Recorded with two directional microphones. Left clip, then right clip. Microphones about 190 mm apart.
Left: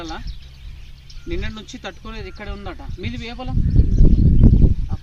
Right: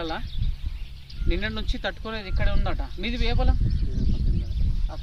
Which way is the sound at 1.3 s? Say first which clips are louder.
Even; 20° right (ahead or behind).